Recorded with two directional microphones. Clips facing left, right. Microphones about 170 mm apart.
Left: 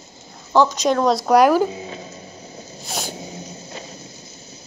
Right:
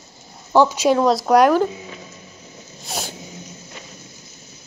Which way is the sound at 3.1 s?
35° left (ahead or behind).